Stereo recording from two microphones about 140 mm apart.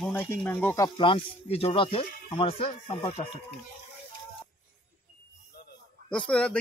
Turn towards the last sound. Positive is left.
turn(degrees=5)  # may be behind; listen again after turning